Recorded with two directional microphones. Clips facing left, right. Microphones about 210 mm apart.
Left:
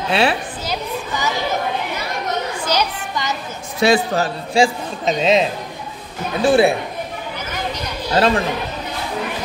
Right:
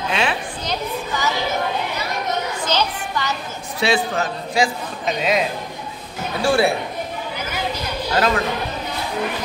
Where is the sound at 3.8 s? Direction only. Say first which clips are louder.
Left 4 dB; 40° left (ahead or behind); by 6.7 s 20° left (ahead or behind).